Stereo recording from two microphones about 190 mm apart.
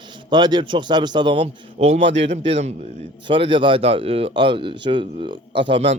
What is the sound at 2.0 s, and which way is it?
Speech, 70° right (ahead or behind).